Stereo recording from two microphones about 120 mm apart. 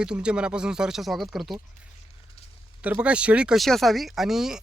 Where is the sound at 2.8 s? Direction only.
10° right (ahead or behind).